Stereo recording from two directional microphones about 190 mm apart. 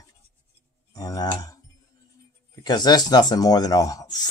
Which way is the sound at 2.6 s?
20° left (ahead or behind).